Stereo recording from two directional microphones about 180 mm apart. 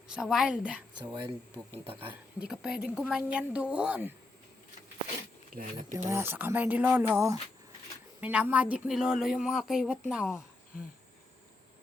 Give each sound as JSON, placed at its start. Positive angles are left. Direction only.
{"t": 0.1, "sound": "speech", "side_deg": 0}
{"t": 1.1, "sound": "speech", "side_deg": -25}
{"t": 2.4, "sound": "speech", "side_deg": -5}
{"t": 5.5, "sound": "speech", "side_deg": -50}
{"t": 6.1, "sound": "speech", "side_deg": -15}